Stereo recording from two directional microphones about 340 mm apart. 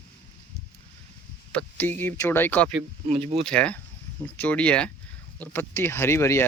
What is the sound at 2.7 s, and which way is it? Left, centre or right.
Speech, centre.